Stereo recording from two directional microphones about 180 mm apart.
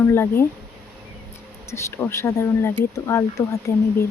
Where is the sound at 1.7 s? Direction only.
15° left (ahead or behind).